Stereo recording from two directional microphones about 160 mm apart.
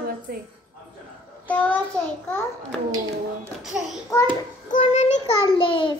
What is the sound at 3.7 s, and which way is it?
Speech, 5° right (ahead or behind).